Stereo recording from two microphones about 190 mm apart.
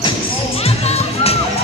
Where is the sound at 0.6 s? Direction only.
30° left (ahead or behind).